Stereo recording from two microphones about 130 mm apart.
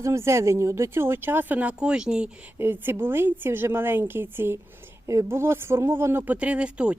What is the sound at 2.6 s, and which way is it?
Speech, 15° right (ahead or behind).